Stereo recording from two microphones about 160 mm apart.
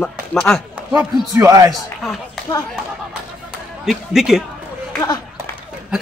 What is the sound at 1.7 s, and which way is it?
Speech, centre (ahead or behind).